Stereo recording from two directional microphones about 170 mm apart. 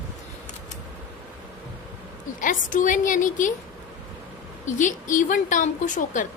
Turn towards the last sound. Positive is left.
turn(degrees=50)  # may be behind; listen again after turning